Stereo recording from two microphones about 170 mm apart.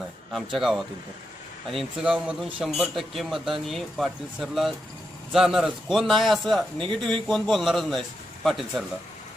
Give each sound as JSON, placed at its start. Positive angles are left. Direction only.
{"t": 0.3, "sound": "speech", "side_deg": 0}
{"t": 6.7, "sound": "a man's voice", "side_deg": -30}
{"t": 7.1, "sound": "speech", "side_deg": 5}